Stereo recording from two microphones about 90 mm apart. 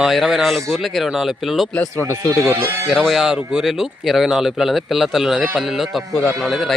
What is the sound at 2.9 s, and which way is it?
A man's voice, centre (ahead or behind).